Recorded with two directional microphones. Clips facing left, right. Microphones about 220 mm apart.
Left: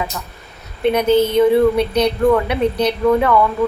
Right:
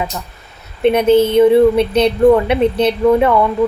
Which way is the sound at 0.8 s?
25° right (ahead or behind).